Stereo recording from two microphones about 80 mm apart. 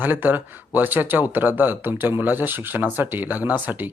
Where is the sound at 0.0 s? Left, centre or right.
Right.